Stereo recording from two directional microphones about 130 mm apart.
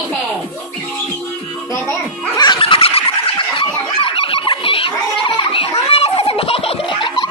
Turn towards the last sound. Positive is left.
turn(degrees=40)  # may be behind; listen again after turning